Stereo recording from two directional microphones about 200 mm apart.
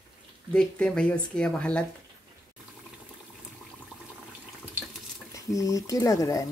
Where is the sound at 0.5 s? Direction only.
5° left (ahead or behind).